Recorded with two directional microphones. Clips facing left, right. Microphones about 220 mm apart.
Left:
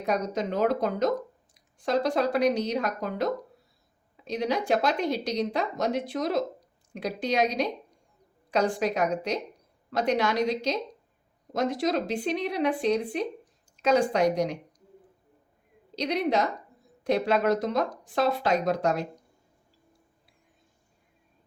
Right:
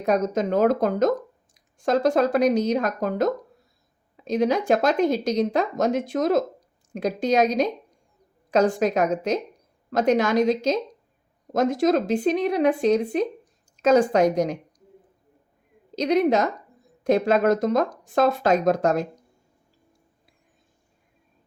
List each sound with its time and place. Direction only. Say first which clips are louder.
0.0 s speech: right 6 dB; 45° right (ahead or behind)
16.0 s speech: right 6 dB; 45° right (ahead or behind)